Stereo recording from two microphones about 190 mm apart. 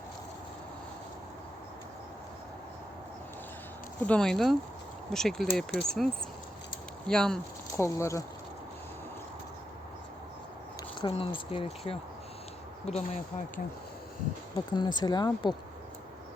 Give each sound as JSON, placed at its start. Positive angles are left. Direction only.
{"t": 4.0, "sound": "speech", "side_deg": 5}
{"t": 7.1, "sound": "speech", "side_deg": 5}
{"t": 7.8, "sound": "speech", "side_deg": 15}
{"t": 11.0, "sound": "speech", "side_deg": 25}
{"t": 14.7, "sound": "speech", "side_deg": 20}